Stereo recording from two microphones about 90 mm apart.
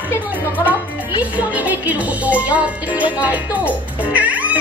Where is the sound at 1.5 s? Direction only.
15° right (ahead or behind).